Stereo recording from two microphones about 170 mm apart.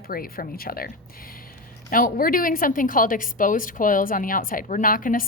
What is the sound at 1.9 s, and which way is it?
A woman's voice, 55° left (ahead or behind).